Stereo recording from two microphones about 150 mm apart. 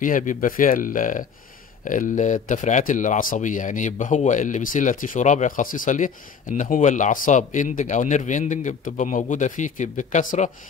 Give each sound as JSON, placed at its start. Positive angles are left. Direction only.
{"t": 0.0, "sound": "speech", "side_deg": 60}